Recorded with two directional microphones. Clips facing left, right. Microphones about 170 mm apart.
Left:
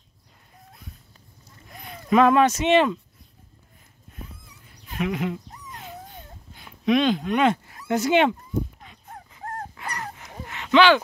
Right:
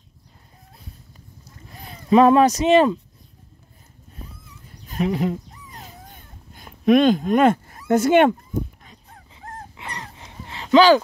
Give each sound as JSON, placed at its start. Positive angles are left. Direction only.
{"t": 1.8, "sound": "speech", "side_deg": -30}
{"t": 4.6, "sound": "cat", "side_deg": -40}
{"t": 9.3, "sound": "dog", "side_deg": -25}